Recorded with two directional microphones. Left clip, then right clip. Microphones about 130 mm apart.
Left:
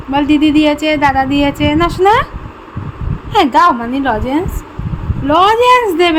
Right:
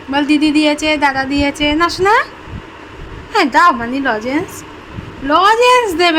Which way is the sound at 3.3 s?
10° left (ahead or behind).